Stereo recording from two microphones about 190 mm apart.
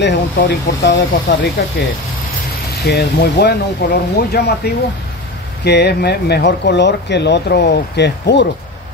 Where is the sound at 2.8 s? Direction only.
60° left (ahead or behind).